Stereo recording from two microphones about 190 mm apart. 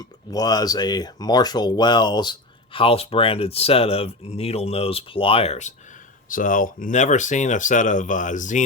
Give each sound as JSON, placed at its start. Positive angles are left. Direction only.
{"t": 0.0, "sound": "speech", "side_deg": 20}
{"t": 6.2, "sound": "speech", "side_deg": 45}